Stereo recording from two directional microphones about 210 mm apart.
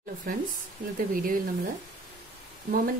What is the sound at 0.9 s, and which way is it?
Speech, 40° right (ahead or behind).